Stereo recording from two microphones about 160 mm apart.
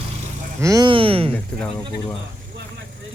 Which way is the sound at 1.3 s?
10° left (ahead or behind).